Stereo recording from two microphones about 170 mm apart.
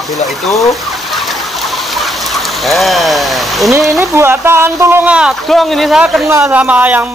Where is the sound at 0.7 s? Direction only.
Centre (ahead or behind).